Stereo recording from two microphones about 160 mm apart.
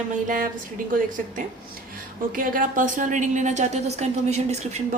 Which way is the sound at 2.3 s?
60° right (ahead or behind).